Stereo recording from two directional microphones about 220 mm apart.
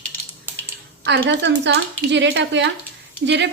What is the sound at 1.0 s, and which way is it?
Speech, 50° right (ahead or behind).